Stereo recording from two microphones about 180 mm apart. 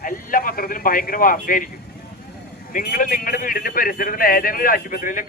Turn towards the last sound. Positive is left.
turn(degrees=50)  # may be behind; listen again after turning